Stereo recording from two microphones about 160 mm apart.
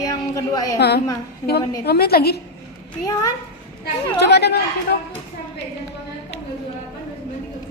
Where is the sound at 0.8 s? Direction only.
90° left.